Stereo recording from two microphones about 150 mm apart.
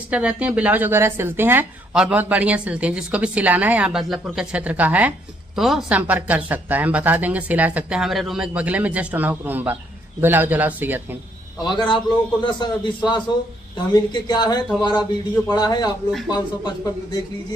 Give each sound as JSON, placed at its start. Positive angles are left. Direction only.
{"t": 0.1, "sound": "speech", "side_deg": -10}
{"t": 11.6, "sound": "a man's voice", "side_deg": 30}